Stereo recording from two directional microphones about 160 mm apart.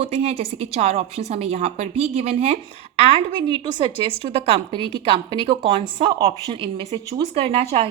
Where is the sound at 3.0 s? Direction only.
30° right (ahead or behind).